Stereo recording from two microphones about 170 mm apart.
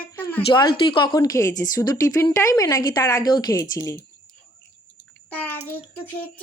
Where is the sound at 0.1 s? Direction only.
10° left (ahead or behind).